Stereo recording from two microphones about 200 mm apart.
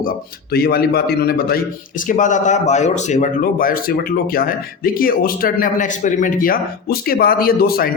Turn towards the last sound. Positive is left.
turn(degrees=50)  # may be behind; listen again after turning